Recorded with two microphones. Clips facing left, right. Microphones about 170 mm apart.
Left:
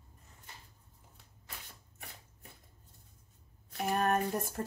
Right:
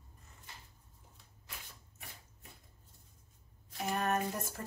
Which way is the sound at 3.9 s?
55° left (ahead or behind).